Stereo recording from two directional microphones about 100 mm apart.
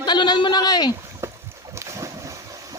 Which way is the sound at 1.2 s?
25° right (ahead or behind).